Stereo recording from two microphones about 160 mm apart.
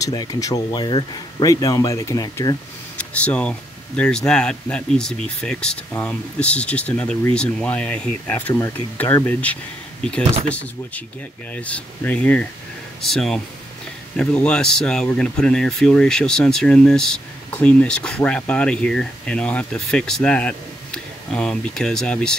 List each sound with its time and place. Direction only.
0.0 s speech: 25° left (ahead or behind)
3.0 s speech: 10° left (ahead or behind)